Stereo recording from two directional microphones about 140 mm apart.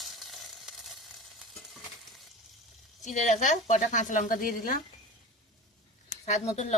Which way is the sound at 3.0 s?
60° left (ahead or behind).